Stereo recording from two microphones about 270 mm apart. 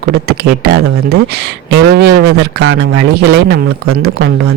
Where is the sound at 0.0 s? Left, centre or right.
Right.